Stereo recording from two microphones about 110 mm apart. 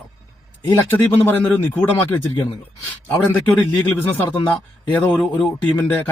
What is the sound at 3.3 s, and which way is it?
Speech, 15° left (ahead or behind).